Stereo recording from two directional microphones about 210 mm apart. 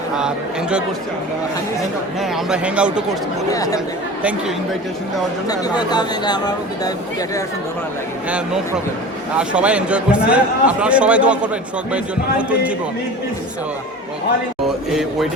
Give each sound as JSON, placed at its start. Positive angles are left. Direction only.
{"t": 0.2, "sound": "a man's voice", "side_deg": -5}
{"t": 2.3, "sound": "a man's voice", "side_deg": -5}
{"t": 3.5, "sound": "speech", "side_deg": 15}
{"t": 4.2, "sound": "a man's voice", "side_deg": -5}
{"t": 5.5, "sound": "speech", "side_deg": 20}
{"t": 9.4, "sound": "a man's voice", "side_deg": -5}
{"t": 12.4, "sound": "speech", "side_deg": -5}